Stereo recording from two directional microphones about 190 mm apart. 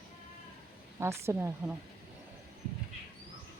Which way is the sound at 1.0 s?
15° right (ahead or behind).